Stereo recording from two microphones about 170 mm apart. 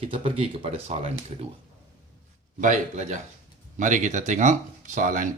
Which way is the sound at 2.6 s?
45° right (ahead or behind).